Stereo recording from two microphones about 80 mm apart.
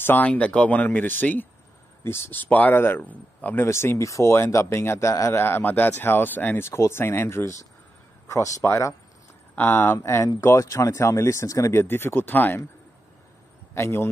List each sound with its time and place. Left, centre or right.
0.0 s a man's voice: left
5.4 s a man's voice: left
9.6 s speech: left
9.9 s a man's voice: left
11.7 s speech: left
13.7 s a man's voice: left